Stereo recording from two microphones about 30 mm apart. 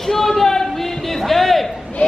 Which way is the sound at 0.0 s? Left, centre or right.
Centre.